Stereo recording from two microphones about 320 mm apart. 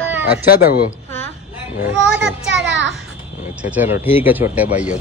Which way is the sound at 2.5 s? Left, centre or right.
Right.